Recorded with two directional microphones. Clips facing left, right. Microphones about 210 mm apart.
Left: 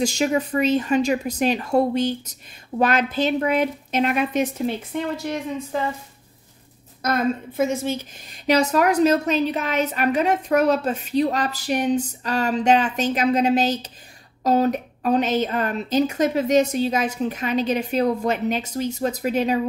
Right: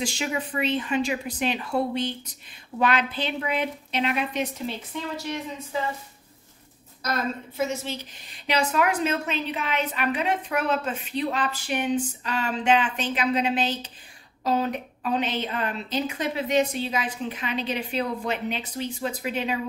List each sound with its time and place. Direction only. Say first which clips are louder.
0.0 s a woman's voice: left 8 dB; 40° left (ahead or behind)
7.0 s a woman's voice: left 7 dB; 55° left (ahead or behind)